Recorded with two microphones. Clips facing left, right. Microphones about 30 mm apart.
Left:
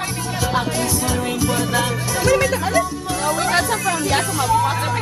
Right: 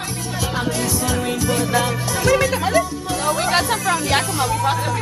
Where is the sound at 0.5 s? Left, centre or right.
Centre.